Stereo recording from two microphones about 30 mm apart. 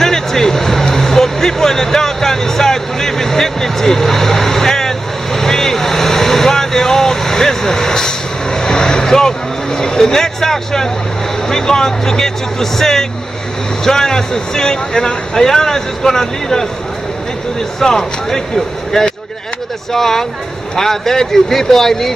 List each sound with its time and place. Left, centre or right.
0.0 s music: centre
11.4 s speech: centre
17.7 s speech: centre
19.9 s speech: centre